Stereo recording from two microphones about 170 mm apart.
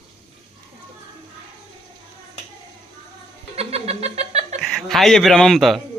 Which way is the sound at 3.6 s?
35° right (ahead or behind).